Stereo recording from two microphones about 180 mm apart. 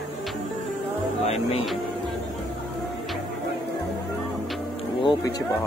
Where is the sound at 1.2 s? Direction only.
35° left (ahead or behind).